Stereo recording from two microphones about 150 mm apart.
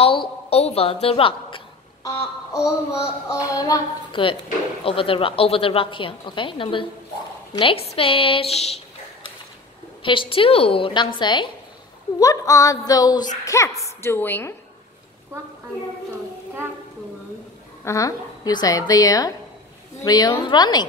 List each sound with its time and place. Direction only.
0.0 s a woman's voice: 40° left (ahead or behind)
2.5 s a child's voice: 20° left (ahead or behind); by 8.8 s 45° left (ahead or behind)
10.0 s a woman's voice: 35° left (ahead or behind); by 14.5 s 15° left (ahead or behind)
17.8 s a child's voice: 20° left (ahead or behind)